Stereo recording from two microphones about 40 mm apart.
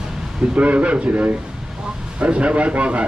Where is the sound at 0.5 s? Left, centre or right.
Right.